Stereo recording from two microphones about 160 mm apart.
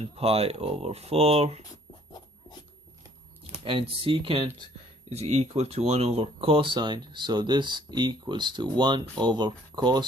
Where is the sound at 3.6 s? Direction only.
35° right (ahead or behind).